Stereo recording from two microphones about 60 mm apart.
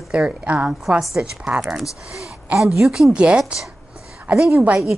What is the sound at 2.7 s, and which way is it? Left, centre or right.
A woman's voice, centre.